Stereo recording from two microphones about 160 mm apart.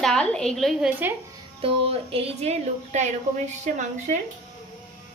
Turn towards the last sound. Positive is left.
turn(degrees=-50)  # may be behind; listen again after turning